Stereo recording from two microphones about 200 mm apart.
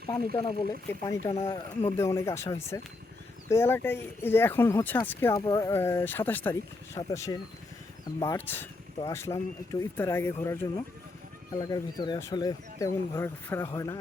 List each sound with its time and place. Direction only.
0.3 s speech: 25° left (ahead or behind)
1.8 s speech: 15° left (ahead or behind)
11.6 s speech: 20° left (ahead or behind)